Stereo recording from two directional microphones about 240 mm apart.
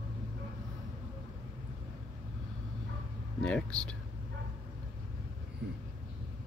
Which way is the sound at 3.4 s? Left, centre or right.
Centre.